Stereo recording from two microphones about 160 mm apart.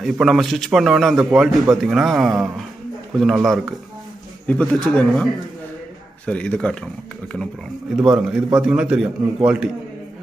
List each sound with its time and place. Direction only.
0.0 s a man's voice: centre (ahead or behind)
4.5 s a man's voice: 10° left (ahead or behind)
7.9 s a man's voice: 5° right (ahead or behind)